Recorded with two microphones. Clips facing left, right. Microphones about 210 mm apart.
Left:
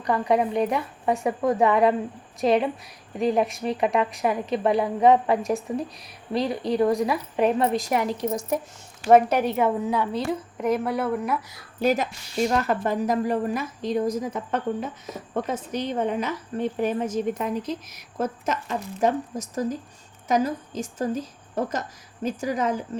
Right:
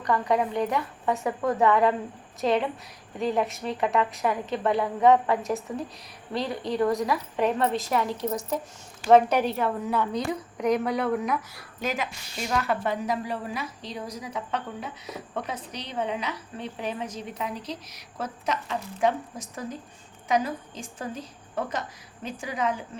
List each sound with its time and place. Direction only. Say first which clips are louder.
0.1 s a woman's voice: left 3 dB; 10° left (ahead or behind)
11.8 s a woman's voice: left 7 dB; 35° left (ahead or behind)